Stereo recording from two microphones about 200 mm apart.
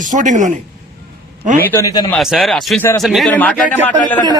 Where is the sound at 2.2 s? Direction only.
Centre (ahead or behind).